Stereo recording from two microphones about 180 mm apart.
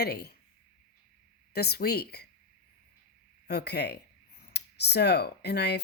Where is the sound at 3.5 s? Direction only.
65° left (ahead or behind).